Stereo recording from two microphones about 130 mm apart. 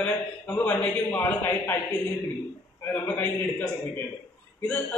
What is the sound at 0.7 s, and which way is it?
A man's voice, 10° left (ahead or behind).